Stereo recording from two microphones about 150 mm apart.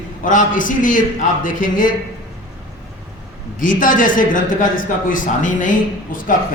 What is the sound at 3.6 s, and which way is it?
Speech, 65° left (ahead or behind).